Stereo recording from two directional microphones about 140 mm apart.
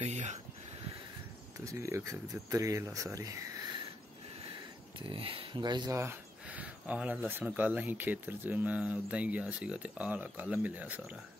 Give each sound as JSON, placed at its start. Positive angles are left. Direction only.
{"t": 0.0, "sound": "a sound", "side_deg": -55}
{"t": 1.6, "sound": "speech", "side_deg": -20}
{"t": 4.9, "sound": "speech", "side_deg": -40}
{"t": 5.9, "sound": "speech", "side_deg": -15}